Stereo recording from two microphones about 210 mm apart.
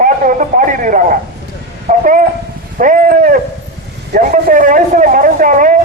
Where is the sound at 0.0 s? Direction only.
40° right (ahead or behind).